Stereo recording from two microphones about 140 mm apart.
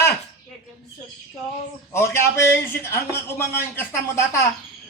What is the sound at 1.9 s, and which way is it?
A man's voice, 20° left (ahead or behind).